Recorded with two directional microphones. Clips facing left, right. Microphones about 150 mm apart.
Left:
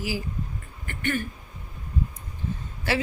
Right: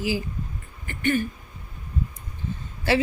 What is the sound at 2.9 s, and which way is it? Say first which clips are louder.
Speech: right 4 dB; 25° right (ahead or behind).